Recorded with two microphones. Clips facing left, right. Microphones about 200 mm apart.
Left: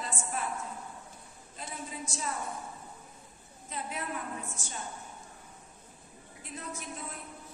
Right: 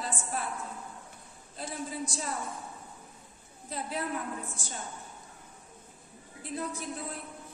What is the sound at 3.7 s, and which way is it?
Speech, 35° right (ahead or behind).